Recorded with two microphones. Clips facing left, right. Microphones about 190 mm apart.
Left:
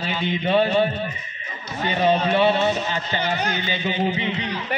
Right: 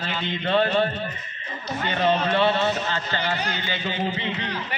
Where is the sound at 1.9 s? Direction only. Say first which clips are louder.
Left 3 dB; 15° left (ahead or behind).